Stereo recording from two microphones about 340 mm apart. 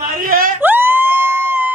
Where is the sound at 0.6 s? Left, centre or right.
Centre.